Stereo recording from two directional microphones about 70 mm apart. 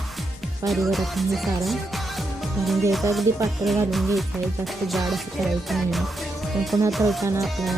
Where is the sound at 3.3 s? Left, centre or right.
Right.